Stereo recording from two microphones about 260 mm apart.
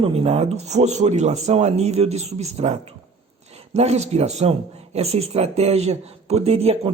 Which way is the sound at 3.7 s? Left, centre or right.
Right.